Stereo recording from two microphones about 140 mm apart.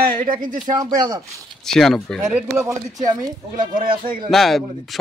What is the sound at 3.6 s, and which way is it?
Speech, 85° right.